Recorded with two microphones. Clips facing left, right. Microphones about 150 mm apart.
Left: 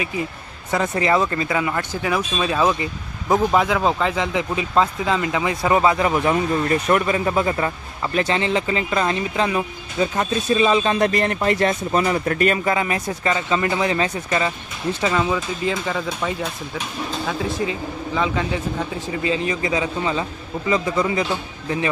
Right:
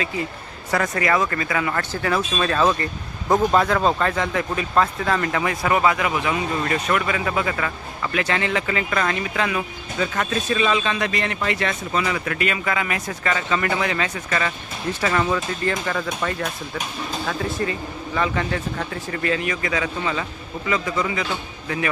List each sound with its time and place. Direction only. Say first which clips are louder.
0.7 s speech: left 2 dB; 20° left (ahead or behind); by 12.7 s 40° left (ahead or behind)
12.7 s speech: left 3 dB; 30° left (ahead or behind)
15.0 s speech: even; 10° left (ahead or behind)
17.2 s speech: left 1 dB; 5° left (ahead or behind)
19.3 s speech: left 2 dB; 25° left (ahead or behind)